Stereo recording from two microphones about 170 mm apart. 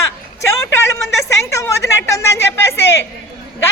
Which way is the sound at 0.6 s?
15° left (ahead or behind).